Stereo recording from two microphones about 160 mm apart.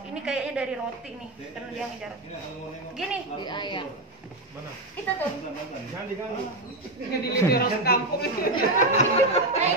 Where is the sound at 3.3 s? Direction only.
30° left (ahead or behind).